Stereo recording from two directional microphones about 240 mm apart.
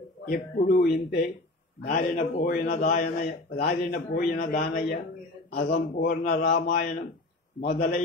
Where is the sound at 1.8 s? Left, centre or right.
Left.